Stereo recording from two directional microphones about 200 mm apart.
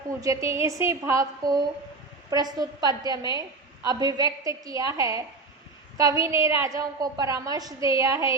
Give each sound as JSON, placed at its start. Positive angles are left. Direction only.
{"t": 0.2, "sound": "a woman's voice", "side_deg": -15}